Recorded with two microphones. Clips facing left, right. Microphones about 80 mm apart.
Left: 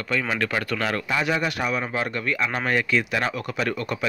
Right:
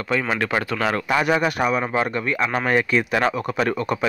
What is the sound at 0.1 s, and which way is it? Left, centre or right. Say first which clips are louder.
Speech: right 3 dB; right.